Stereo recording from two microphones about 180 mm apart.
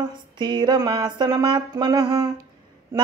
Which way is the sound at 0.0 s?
25° right (ahead or behind).